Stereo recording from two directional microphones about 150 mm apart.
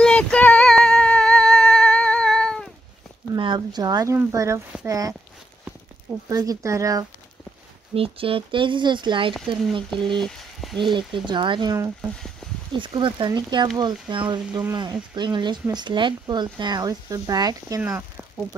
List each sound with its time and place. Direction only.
0.0 s a sound: 5° left (ahead or behind)
3.3 s speech: 30° right (ahead or behind)
6.2 s speech: 25° right (ahead or behind)
7.9 s speech: 40° right (ahead or behind)
10.1 s speech: 5° left (ahead or behind)
10.8 s speech: 35° right (ahead or behind)
12.7 s speech: 35° right (ahead or behind); by 18.0 s 20° right (ahead or behind)